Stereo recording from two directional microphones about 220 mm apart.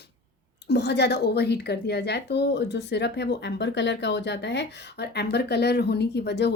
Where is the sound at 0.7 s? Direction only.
50° left (ahead or behind).